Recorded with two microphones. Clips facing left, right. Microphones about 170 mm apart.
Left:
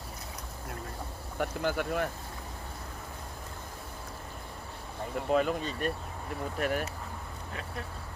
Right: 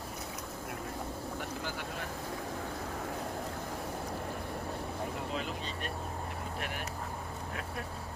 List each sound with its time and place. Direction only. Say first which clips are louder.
1.4 s speech: left 8 dB; 55° left (ahead or behind)
5.3 s speech: left 10 dB; 50° left (ahead or behind)